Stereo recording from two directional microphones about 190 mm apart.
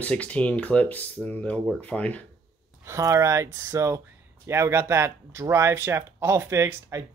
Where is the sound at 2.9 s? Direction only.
15° right (ahead or behind).